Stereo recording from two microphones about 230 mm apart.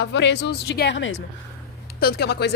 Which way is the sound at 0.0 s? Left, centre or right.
Left.